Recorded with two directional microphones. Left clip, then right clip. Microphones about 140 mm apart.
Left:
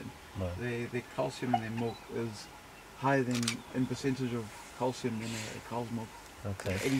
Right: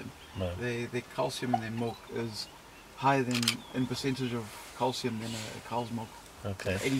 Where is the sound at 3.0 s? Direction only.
30° right (ahead or behind).